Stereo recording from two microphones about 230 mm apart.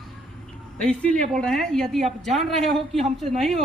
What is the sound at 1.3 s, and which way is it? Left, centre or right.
A woman's voice, centre.